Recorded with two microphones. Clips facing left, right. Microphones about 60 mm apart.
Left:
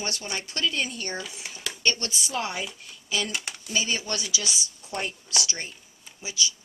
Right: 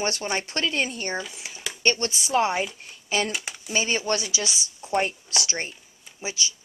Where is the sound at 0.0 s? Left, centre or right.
Right.